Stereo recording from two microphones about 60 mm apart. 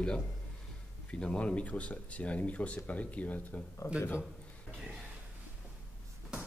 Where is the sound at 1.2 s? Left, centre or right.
Centre.